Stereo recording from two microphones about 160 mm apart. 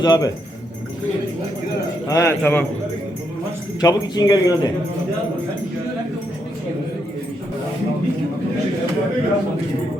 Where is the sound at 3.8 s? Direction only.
25° left (ahead or behind).